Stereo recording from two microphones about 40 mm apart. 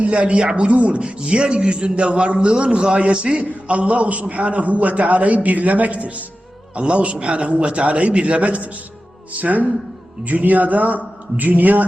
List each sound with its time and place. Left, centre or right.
0.0 s a man's voice: right